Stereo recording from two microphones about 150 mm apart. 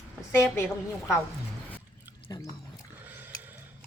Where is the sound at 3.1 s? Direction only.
10° right (ahead or behind).